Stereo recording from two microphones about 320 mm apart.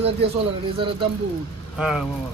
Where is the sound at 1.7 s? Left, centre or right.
Centre.